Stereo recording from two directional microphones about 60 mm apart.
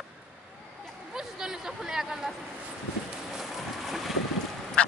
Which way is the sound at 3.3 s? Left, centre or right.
Centre.